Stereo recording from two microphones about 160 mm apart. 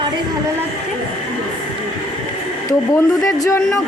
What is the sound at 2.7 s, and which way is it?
Speech, 25° left (ahead or behind).